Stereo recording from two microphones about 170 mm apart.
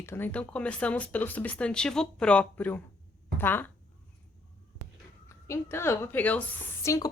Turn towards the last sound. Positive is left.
turn(degrees=20)  # may be behind; listen again after turning